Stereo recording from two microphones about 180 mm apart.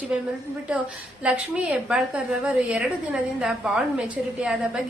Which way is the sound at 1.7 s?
5° right (ahead or behind).